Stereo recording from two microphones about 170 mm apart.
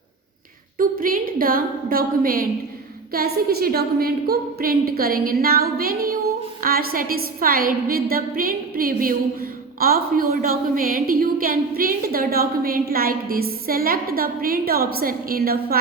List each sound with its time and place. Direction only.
0.8 s a woman's voice: 55° right (ahead or behind)